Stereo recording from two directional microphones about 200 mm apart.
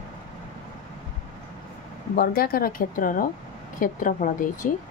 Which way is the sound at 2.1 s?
50° left (ahead or behind).